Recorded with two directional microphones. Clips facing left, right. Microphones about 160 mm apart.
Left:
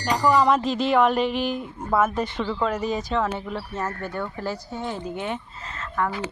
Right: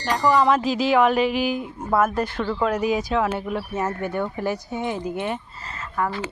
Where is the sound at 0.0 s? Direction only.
Centre (ahead or behind).